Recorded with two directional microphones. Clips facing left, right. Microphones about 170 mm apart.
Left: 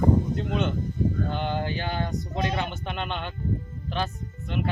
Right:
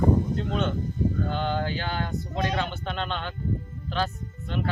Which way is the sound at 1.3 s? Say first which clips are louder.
Right 1 dB; 15° left (ahead or behind).